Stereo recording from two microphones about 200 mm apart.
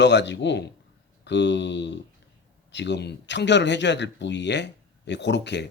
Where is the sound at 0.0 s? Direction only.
60° left (ahead or behind).